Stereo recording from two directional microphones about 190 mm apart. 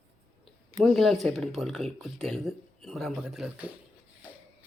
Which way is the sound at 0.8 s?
Centre (ahead or behind).